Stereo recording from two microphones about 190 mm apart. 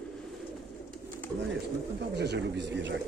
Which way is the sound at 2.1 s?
60° right (ahead or behind).